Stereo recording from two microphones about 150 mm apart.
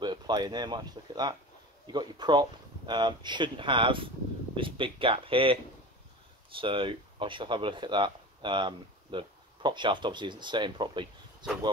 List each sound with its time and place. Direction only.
0.0 s speech: 30° right (ahead or behind)